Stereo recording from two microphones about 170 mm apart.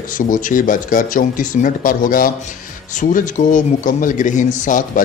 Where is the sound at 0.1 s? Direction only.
50° left (ahead or behind).